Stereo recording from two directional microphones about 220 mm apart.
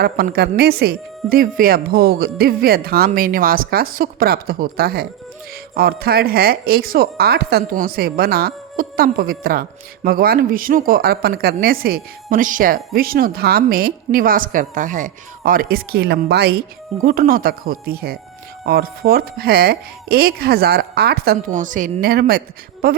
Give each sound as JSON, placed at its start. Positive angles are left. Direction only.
{"t": 0.0, "sound": "speech", "side_deg": -45}